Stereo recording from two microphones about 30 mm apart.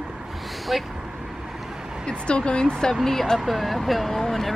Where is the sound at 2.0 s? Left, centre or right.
Left.